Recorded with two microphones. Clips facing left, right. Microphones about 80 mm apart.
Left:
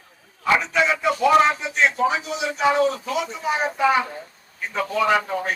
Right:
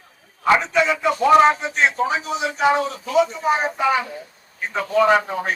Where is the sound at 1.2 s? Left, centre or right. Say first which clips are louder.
Right 4 dB; right.